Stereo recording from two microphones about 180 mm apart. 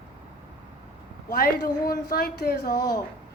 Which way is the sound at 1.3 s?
55° left (ahead or behind).